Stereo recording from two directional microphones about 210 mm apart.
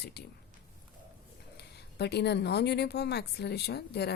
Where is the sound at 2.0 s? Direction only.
50° left (ahead or behind).